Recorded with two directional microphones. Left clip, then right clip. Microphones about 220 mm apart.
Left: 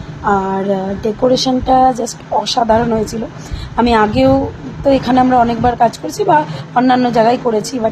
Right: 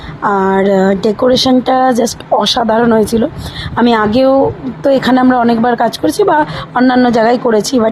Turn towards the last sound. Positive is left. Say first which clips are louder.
# right 5 dB
turn(degrees=-25)  # may be behind; listen again after turning